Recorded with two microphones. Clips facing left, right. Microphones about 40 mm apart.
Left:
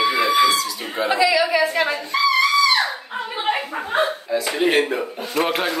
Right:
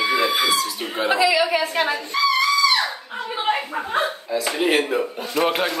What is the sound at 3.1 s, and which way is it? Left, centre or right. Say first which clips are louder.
Speech: even; centre.